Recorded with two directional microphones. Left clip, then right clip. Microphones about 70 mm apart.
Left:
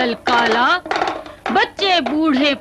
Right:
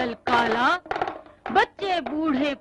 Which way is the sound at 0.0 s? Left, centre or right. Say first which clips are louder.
Left 7 dB; left.